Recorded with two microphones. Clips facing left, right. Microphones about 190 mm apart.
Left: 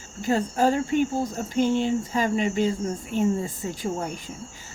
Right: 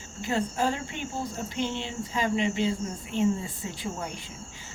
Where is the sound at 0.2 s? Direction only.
40° left (ahead or behind).